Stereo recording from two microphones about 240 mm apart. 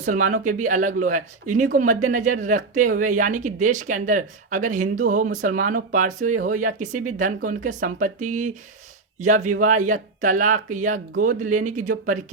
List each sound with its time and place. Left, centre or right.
0.0 s speech: right